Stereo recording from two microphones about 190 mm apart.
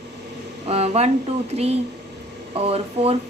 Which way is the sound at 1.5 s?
35° right (ahead or behind).